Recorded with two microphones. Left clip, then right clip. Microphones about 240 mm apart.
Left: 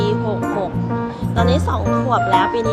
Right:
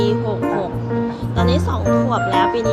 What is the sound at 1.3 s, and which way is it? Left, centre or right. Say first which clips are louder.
Music: left 2 dB; centre.